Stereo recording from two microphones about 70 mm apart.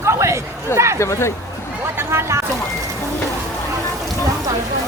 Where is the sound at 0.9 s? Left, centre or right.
Left.